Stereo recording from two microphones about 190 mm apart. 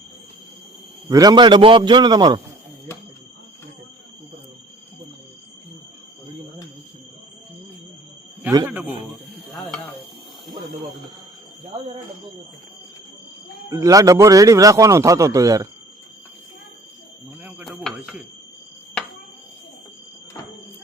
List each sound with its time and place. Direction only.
1.1 s a man's voice: 20° right (ahead or behind)
8.6 s a sound: 5° right (ahead or behind)
13.7 s a man's voice: 15° right (ahead or behind)
17.4 s chopping: 5° right (ahead or behind)